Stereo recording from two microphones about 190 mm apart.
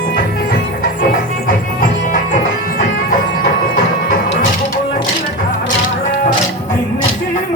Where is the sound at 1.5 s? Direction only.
45° left (ahead or behind).